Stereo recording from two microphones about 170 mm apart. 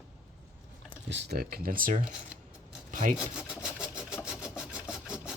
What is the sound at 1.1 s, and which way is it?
Speech, 80° right.